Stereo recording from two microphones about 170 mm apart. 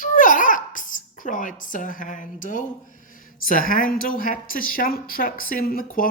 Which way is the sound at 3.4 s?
55° left (ahead or behind).